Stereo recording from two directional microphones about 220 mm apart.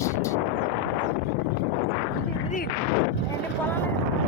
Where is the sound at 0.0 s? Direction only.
15° left (ahead or behind).